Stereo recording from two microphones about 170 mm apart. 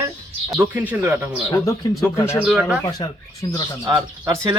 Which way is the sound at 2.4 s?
5° right (ahead or behind).